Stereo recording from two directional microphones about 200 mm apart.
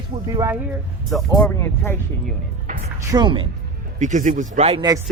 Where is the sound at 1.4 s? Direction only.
10° left (ahead or behind).